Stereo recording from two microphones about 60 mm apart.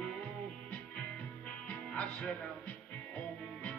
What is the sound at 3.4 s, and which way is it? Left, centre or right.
Music, centre.